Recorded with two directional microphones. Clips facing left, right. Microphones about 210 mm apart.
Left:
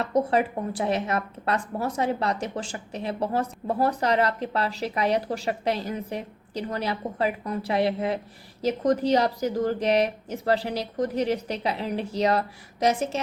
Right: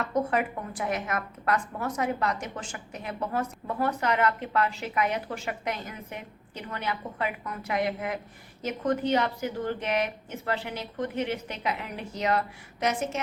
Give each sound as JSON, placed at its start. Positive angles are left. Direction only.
{"t": 0.0, "sound": "speech", "side_deg": 30}